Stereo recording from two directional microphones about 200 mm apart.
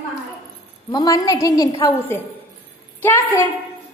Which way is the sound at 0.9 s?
20° left (ahead or behind).